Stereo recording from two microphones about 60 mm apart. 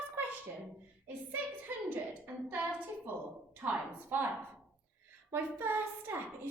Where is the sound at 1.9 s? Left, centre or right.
Right.